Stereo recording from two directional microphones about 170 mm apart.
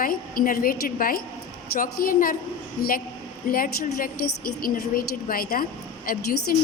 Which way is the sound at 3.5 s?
55° left (ahead or behind).